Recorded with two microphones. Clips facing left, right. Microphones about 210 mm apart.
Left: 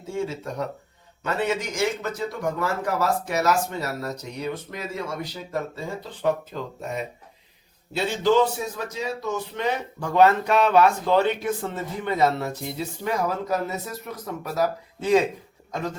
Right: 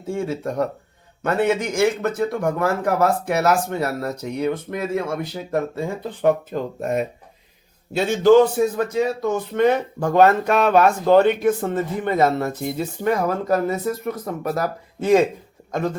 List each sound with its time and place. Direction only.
0.1 s a man's voice: 55° right (ahead or behind)